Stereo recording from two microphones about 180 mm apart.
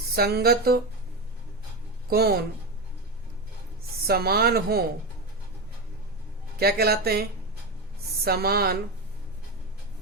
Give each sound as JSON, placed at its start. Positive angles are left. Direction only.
{"t": 0.2, "sound": "speech", "side_deg": -60}
{"t": 2.0, "sound": "speech", "side_deg": -60}
{"t": 4.0, "sound": "speech", "side_deg": -60}
{"t": 6.6, "sound": "speech", "side_deg": -60}